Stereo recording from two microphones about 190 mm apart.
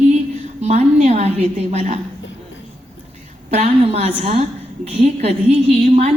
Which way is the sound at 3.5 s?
35° right (ahead or behind).